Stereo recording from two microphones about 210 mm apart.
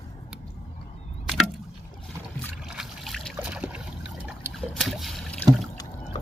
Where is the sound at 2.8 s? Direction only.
Centre (ahead or behind).